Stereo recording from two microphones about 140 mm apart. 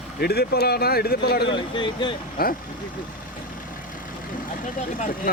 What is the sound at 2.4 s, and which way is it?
Speech, 90° left.